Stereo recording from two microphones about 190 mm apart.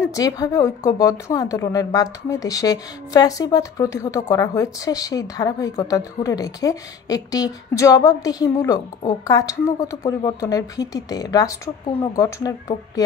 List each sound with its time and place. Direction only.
0.1 s a woman's voice: 20° left (ahead or behind)